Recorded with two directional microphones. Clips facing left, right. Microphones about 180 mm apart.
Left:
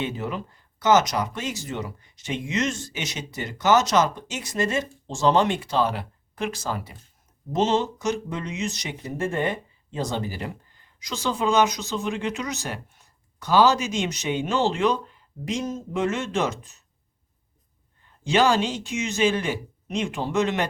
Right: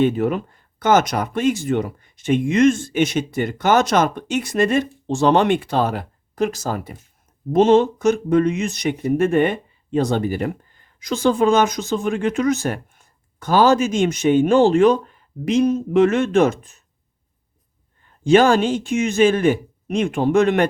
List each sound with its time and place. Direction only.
0.0 s speech: 55° right (ahead or behind)
18.2 s speech: 50° right (ahead or behind)